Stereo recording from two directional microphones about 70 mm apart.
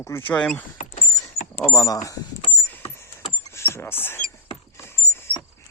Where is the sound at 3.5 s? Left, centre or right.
Left.